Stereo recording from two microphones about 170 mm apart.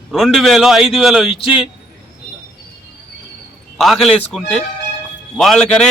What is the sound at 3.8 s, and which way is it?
A man's voice, centre (ahead or behind).